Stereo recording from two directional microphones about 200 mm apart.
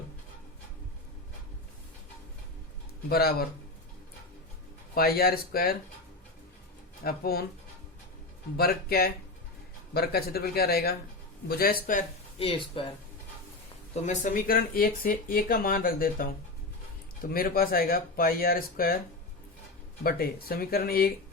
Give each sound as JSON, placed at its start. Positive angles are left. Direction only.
{"t": 3.1, "sound": "speech", "side_deg": 50}
{"t": 4.9, "sound": "speech", "side_deg": 50}
{"t": 7.0, "sound": "speech", "side_deg": 50}
{"t": 8.5, "sound": "speech", "side_deg": 50}
{"t": 12.4, "sound": "speech", "side_deg": 25}
{"t": 13.9, "sound": "speech", "side_deg": 35}
{"t": 17.3, "sound": "speech", "side_deg": 45}
{"t": 20.1, "sound": "speech", "side_deg": 50}